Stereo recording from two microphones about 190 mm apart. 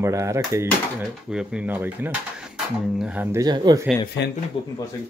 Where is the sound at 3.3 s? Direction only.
20° right (ahead or behind).